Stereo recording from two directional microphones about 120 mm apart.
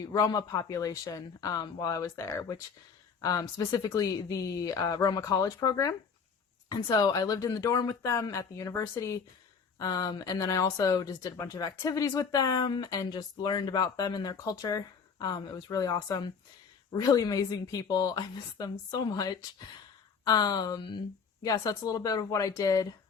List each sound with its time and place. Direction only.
0.0 s speech: 30° left (ahead or behind)